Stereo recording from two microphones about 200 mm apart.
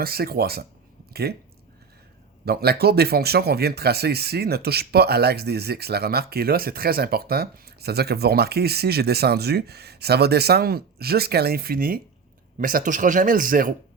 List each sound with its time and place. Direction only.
0.0 s speech: 50° right (ahead or behind)
2.4 s speech: 50° right (ahead or behind)